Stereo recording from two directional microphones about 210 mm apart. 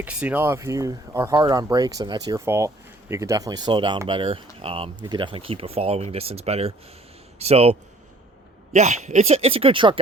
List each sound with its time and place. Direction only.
0.0 s speech: 5° right (ahead or behind); by 10.0 s 25° right (ahead or behind)